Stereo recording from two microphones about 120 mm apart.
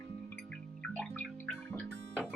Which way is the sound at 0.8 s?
5° left (ahead or behind).